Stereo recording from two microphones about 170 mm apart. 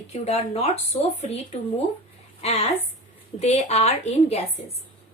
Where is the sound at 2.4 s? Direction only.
40° left (ahead or behind).